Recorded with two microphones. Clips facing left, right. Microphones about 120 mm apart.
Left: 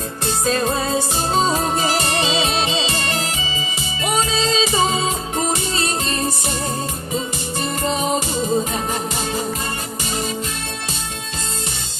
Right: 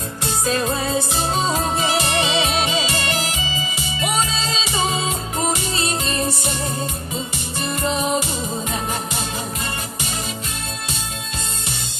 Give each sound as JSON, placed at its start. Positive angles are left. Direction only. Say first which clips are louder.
{"t": 0.4, "sound": "music", "louder": "left 2 dB", "side_deg": 35}
{"t": 4.7, "sound": "music", "louder": "left 3 dB", "side_deg": 35}